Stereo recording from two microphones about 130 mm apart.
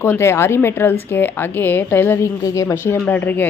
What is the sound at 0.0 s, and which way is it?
A woman's voice, 20° left (ahead or behind).